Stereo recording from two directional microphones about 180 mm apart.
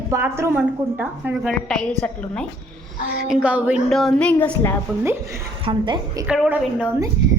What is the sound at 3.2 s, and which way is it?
Speech, 5° right (ahead or behind).